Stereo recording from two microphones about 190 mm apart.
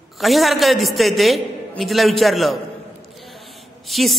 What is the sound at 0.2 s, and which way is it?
A man's voice, centre (ahead or behind).